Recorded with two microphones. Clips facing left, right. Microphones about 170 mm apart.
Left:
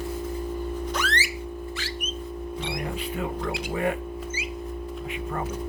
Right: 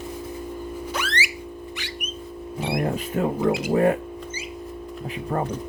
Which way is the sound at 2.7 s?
50° right (ahead or behind).